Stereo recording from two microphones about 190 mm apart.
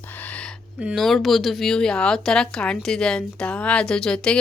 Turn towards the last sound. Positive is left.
turn(degrees=5)  # may be behind; listen again after turning